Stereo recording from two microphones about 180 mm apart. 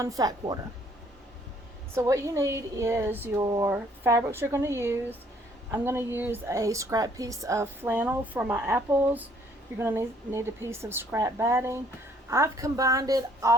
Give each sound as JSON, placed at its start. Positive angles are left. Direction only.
{"t": 0.0, "sound": "speech", "side_deg": -20}
{"t": 2.0, "sound": "speech", "side_deg": -15}